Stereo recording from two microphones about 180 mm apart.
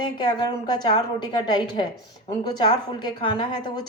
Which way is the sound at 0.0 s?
25° left (ahead or behind).